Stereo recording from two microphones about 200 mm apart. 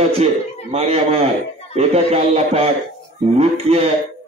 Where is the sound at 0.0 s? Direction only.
30° right (ahead or behind).